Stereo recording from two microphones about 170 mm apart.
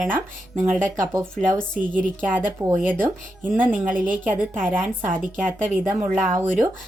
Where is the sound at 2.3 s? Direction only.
10° right (ahead or behind).